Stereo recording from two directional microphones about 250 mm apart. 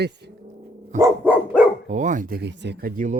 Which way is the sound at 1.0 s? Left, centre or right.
Centre.